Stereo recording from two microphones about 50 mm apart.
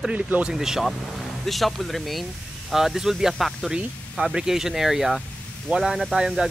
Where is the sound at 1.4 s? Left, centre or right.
Centre.